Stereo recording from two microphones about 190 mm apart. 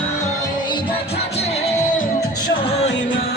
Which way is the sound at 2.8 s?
70° left (ahead or behind).